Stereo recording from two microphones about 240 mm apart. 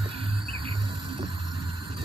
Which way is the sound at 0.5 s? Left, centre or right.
Centre.